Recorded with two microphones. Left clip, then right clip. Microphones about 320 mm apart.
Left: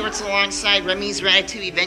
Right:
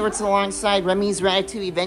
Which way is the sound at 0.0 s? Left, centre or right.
Centre.